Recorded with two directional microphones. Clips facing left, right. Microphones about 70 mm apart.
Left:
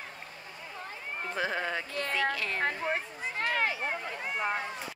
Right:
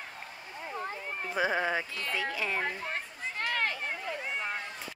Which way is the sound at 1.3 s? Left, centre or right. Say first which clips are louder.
Right 3 dB; centre.